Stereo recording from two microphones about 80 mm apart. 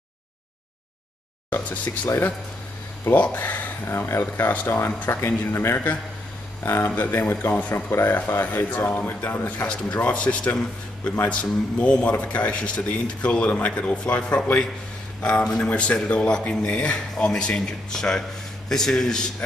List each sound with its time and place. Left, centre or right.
3.1 s speech: left
4.2 s speech: left